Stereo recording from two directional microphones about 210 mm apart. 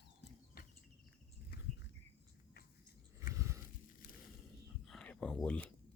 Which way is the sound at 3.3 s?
15° right (ahead or behind).